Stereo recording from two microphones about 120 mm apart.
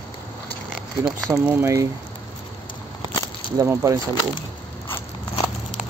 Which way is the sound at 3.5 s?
25° right (ahead or behind).